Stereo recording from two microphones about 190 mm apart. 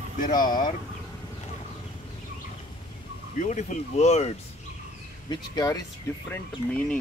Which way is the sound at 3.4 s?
40° left (ahead or behind).